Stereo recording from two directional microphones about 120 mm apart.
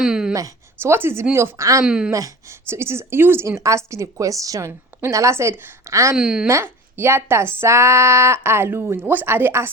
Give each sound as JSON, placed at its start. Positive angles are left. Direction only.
{"t": 0.0, "sound": "a sound", "side_deg": -5}
{"t": 0.3, "sound": "speech", "side_deg": -25}
{"t": 1.8, "sound": "speech", "side_deg": -5}
{"t": 2.1, "sound": "speech", "side_deg": -25}
{"t": 6.1, "sound": "speech", "side_deg": -5}
{"t": 6.5, "sound": "speech", "side_deg": -20}